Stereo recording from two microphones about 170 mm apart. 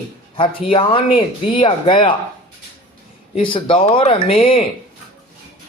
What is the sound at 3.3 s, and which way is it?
Speech, 30° left (ahead or behind).